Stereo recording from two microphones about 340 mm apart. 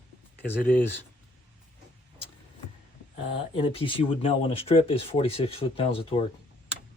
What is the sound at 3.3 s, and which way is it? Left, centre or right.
Speech, centre.